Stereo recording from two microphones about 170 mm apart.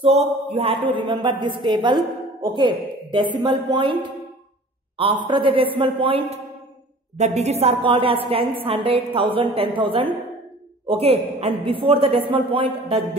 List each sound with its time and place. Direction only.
0.0 s a woman's voice: 35° right (ahead or behind)